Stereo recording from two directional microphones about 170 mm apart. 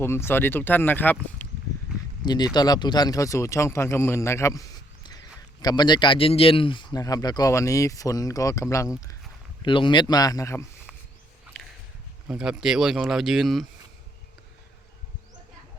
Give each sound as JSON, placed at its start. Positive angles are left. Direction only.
{"t": 0.0, "sound": "speech", "side_deg": 15}
{"t": 2.2, "sound": "speech", "side_deg": 25}
{"t": 5.6, "sound": "speech", "side_deg": 25}
{"t": 12.3, "sound": "speech", "side_deg": -5}